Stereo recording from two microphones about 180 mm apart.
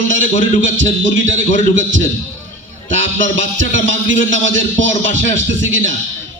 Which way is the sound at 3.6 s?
90° right.